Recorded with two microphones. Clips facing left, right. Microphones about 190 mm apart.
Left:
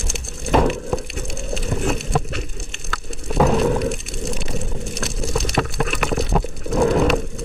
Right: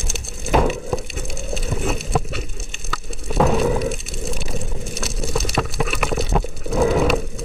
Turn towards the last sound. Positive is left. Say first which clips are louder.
# left 1 dB
turn(degrees=0)  # may be behind; listen again after turning